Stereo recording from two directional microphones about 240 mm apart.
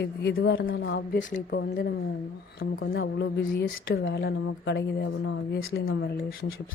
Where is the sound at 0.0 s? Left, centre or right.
Left.